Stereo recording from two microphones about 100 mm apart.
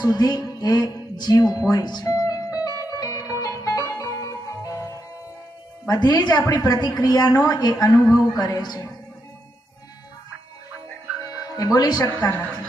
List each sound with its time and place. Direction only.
0.0 s music: 40° left (ahead or behind)
5.9 s a woman's voice: 45° left (ahead or behind)
11.4 s speech: 40° left (ahead or behind)
12.1 s a woman's voice: 15° left (ahead or behind)